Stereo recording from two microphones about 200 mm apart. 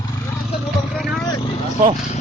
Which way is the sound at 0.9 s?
Centre (ahead or behind).